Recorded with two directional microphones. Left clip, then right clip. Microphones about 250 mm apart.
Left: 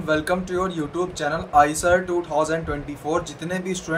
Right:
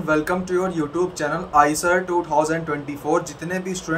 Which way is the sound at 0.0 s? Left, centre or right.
Centre.